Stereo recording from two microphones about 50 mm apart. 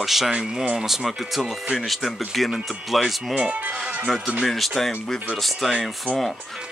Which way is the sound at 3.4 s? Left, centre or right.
Right.